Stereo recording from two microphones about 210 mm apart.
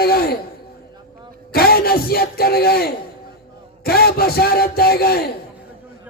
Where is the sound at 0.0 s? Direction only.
45° left (ahead or behind).